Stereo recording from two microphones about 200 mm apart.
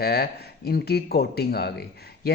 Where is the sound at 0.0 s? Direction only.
50° left (ahead or behind).